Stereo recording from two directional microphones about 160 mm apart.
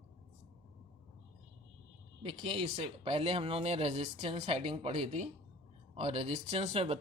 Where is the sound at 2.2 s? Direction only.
35° right (ahead or behind).